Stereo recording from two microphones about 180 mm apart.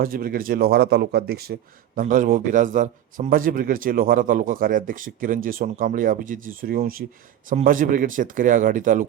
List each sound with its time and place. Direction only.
0.0 s speech: 55° right (ahead or behind)
2.0 s a man's voice: 50° right (ahead or behind)